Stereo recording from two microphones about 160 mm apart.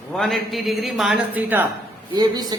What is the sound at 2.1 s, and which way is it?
Speech, 25° right (ahead or behind).